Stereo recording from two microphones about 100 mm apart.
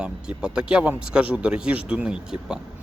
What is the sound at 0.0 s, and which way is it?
Speech, 10° right (ahead or behind).